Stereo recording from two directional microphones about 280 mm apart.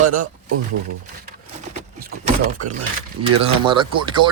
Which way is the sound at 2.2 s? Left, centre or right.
Right.